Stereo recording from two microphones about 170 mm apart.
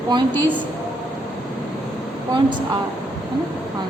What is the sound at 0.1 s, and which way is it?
Speech, 25° right (ahead or behind).